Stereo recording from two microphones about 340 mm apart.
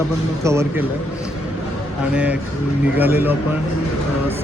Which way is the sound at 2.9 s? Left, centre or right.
Centre.